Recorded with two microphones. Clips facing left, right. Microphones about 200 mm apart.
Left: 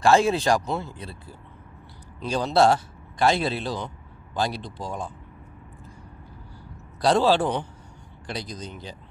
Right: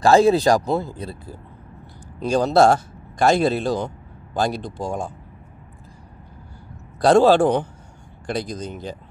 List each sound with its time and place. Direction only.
0.0 s a man's voice: 35° right (ahead or behind)
7.0 s a man's voice: 50° right (ahead or behind)